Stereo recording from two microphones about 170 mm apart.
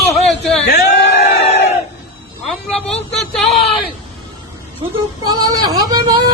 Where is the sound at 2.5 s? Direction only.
5° left (ahead or behind).